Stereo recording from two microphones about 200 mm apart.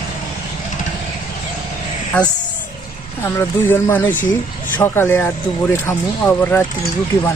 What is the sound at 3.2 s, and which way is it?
Speech, 10° left (ahead or behind).